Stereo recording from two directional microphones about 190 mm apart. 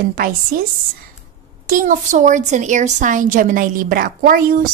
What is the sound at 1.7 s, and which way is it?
A woman's voice, 45° right (ahead or behind).